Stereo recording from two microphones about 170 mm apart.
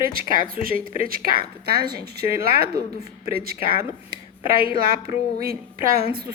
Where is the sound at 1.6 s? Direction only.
70° right (ahead or behind).